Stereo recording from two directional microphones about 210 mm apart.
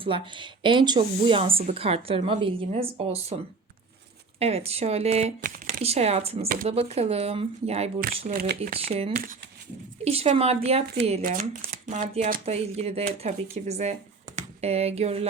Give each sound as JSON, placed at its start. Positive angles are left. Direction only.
{"t": 0.0, "sound": "speech", "side_deg": -25}
{"t": 4.4, "sound": "speech", "side_deg": -30}
{"t": 8.3, "sound": "speech", "side_deg": -45}
{"t": 8.7, "sound": "speech", "side_deg": -30}
{"t": 11.2, "sound": "speech", "side_deg": -40}